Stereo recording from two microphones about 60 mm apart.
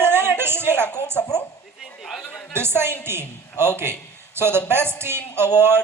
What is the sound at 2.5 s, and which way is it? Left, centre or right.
Speech, right.